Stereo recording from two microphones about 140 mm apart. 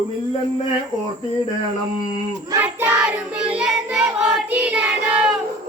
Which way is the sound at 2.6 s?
10° right (ahead or behind).